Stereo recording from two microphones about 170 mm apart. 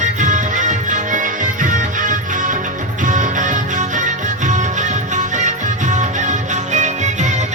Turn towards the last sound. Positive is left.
turn(degrees=-45)  # may be behind; listen again after turning